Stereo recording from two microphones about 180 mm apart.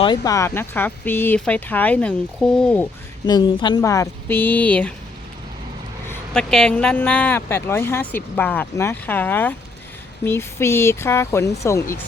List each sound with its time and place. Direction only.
0.2 s speech: 15° left (ahead or behind)
3.2 s speech: 25° left (ahead or behind); by 4.9 s 10° left (ahead or behind)
6.1 s speech: 5° left (ahead or behind)